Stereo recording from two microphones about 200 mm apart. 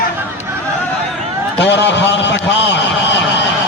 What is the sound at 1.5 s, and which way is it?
A man's voice, 60° left (ahead or behind).